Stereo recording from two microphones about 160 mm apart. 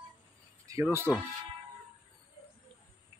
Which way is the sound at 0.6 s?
20° right (ahead or behind).